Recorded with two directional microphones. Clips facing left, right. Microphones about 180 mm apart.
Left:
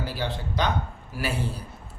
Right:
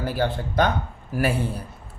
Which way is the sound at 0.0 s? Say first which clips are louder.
Right 6 dB; 50° right (ahead or behind).